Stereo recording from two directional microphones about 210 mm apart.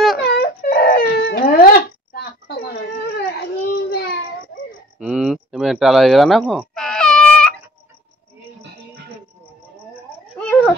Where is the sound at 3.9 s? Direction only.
50° left (ahead or behind).